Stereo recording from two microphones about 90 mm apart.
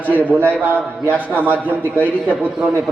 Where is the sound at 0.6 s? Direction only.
20° right (ahead or behind).